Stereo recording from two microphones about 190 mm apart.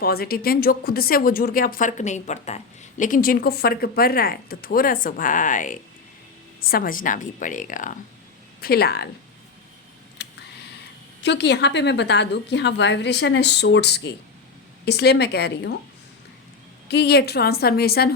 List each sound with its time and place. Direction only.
0.0 s speech: 55° left (ahead or behind)
8.6 s a woman's voice: 55° left (ahead or behind)
10.2 s a sound: 65° left (ahead or behind)
11.2 s a woman's voice: 65° left (ahead or behind)
16.9 s a woman's voice: 60° left (ahead or behind)